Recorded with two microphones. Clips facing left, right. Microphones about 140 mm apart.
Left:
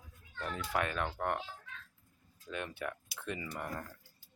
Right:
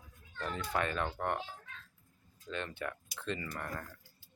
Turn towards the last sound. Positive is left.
turn(degrees=15)  # may be behind; listen again after turning